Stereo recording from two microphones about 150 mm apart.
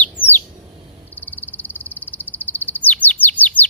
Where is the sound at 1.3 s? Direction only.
15° left (ahead or behind).